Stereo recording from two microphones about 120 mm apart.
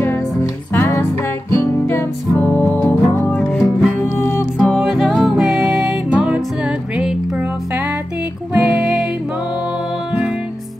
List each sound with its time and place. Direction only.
0.0 s music: 20° left (ahead or behind)
4.0 s music: 20° left (ahead or behind)
4.6 s music: 5° left (ahead or behind)
8.5 s music: 5° right (ahead or behind)